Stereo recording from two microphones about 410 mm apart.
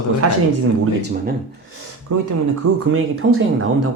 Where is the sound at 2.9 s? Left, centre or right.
Right.